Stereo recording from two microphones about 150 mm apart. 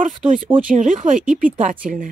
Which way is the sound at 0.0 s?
60° right (ahead or behind).